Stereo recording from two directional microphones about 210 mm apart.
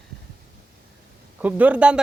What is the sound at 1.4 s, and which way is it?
Speech, 5° right (ahead or behind).